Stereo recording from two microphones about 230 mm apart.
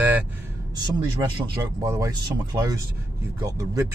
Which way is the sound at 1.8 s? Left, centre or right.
Centre.